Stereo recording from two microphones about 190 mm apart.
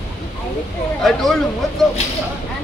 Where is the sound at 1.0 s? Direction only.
Centre (ahead or behind).